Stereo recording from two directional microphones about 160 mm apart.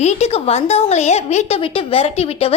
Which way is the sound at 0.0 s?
45° left (ahead or behind).